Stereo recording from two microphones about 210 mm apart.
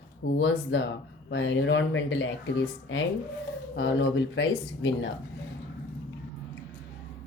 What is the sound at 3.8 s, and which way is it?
Speech, 60° left (ahead or behind).